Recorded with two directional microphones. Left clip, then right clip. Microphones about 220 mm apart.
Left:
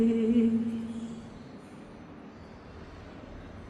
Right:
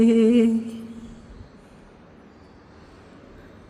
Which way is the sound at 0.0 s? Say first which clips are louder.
Right 9 dB; 50° right (ahead or behind).